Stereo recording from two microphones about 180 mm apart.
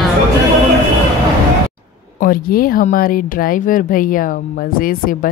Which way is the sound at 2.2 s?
55° left (ahead or behind).